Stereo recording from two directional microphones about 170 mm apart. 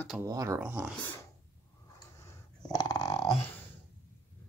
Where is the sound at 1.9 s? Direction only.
25° left (ahead or behind).